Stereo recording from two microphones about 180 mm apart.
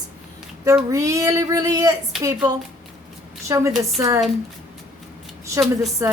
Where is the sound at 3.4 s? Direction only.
15° right (ahead or behind).